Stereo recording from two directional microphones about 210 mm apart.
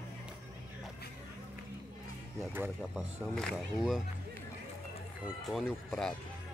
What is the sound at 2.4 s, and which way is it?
Speech, 10° right (ahead or behind).